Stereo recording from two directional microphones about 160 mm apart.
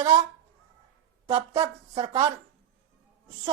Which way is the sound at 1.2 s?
25° right (ahead or behind).